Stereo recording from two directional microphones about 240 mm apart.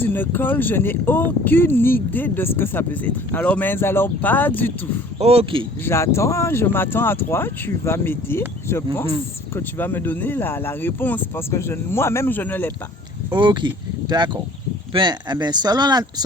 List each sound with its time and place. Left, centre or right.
0.0 s speech: centre
5.2 s speech: right
5.8 s speech: centre
13.3 s speech: centre
14.9 s speech: centre